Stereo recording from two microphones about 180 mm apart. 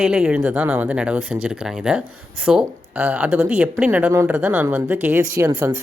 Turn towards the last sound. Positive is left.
turn(degrees=-15)  # may be behind; listen again after turning